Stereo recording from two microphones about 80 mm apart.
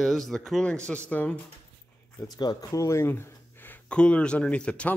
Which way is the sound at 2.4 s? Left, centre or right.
Left.